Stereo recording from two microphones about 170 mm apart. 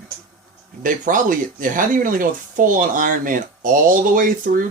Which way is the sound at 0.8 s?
50° right (ahead or behind).